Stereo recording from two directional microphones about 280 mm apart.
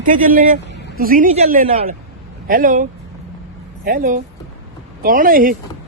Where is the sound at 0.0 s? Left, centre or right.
Right.